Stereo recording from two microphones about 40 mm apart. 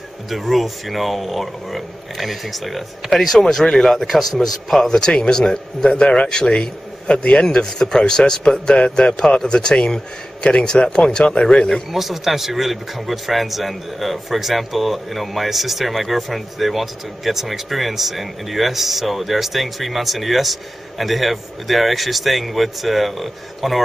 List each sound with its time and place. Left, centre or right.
0.3 s a man's voice: centre
4.8 s a man's voice: centre
11.9 s a man's voice: centre